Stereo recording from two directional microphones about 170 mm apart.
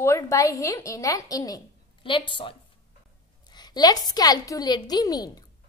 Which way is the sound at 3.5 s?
25° left (ahead or behind).